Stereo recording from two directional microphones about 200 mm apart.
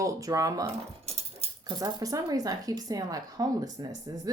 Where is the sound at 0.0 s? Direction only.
15° right (ahead or behind).